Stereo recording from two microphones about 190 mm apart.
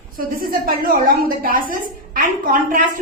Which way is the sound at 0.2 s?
50° right (ahead or behind).